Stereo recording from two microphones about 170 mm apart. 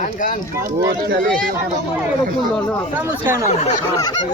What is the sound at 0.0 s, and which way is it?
Speech, 50° left (ahead or behind).